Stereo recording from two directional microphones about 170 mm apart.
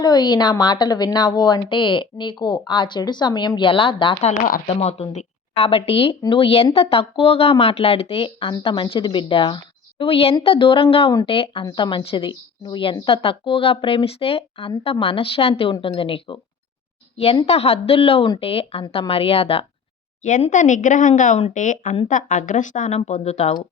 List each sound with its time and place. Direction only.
0.0 s a woman's voice: 25° left (ahead or behind); by 4.7 s 55° left (ahead or behind)
4.7 s a woman's voice: 40° left (ahead or behind)
20.2 s speech: 45° left (ahead or behind)